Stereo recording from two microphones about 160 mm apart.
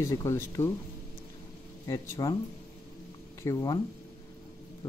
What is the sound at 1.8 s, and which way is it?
Speech, 20° left (ahead or behind).